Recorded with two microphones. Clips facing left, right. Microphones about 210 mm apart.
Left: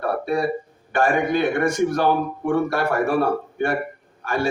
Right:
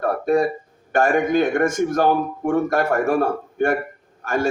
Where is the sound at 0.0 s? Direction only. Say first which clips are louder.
Right 4 dB; 45° right (ahead or behind).